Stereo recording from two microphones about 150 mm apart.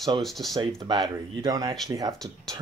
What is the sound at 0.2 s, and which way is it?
Speech, centre (ahead or behind).